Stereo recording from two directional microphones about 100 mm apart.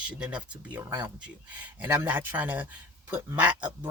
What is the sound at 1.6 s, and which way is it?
Speech, 15° right (ahead or behind).